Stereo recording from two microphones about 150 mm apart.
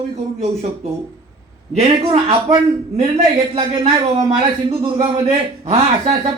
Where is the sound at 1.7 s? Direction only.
40° right (ahead or behind).